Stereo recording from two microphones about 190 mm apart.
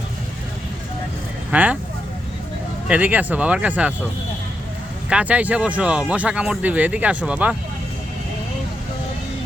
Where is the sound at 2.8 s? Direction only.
5° right (ahead or behind).